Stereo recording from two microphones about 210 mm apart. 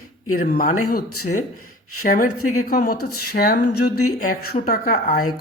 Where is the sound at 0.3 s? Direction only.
40° left (ahead or behind).